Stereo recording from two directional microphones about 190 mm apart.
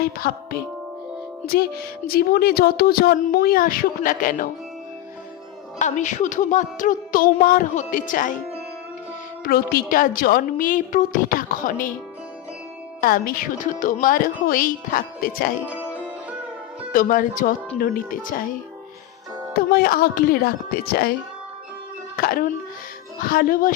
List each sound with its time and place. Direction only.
0.0 s speech: 55° left (ahead or behind)
5.8 s speech: 40° left (ahead or behind)
9.4 s speech: 50° left (ahead or behind)
13.0 s speech: 50° left (ahead or behind)
15.6 s music: 10° right (ahead or behind)
16.9 s speech: 45° left (ahead or behind)
19.5 s speech: 50° left (ahead or behind)